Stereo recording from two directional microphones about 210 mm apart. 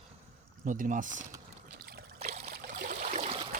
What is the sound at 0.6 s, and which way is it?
Speech, 40° right (ahead or behind).